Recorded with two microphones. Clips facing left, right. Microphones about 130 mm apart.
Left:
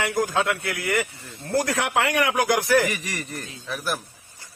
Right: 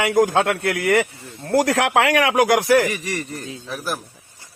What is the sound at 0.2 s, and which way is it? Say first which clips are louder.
Speech: right 7 dB; 80° right.